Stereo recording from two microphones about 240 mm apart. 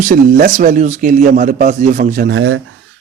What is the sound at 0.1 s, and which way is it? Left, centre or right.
Speech, right.